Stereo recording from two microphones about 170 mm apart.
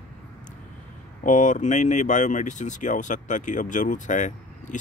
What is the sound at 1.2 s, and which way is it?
Speech, 50° left (ahead or behind).